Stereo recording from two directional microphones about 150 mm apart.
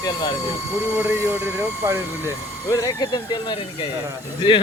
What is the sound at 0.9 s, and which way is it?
Speech, 15° right (ahead or behind).